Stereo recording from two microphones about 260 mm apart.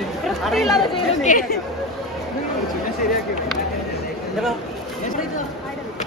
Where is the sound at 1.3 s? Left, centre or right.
Left.